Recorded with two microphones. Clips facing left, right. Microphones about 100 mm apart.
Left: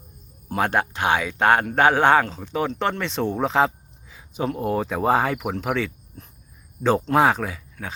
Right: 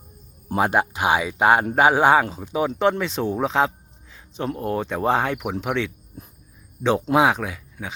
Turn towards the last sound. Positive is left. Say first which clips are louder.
# even
turn(degrees=-5)  # may be behind; listen again after turning